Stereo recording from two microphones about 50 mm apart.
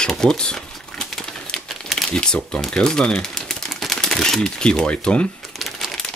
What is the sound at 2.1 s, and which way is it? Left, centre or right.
Speech, centre.